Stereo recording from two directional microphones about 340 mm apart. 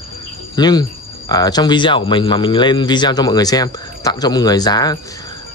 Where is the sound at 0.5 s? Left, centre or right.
Centre.